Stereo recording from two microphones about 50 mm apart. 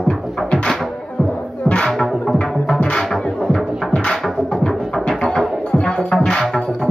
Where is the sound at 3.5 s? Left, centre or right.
Centre.